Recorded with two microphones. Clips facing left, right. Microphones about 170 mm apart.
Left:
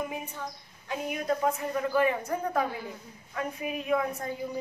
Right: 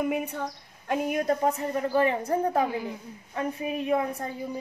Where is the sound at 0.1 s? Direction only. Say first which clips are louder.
Right 7 dB; 65° right (ahead or behind).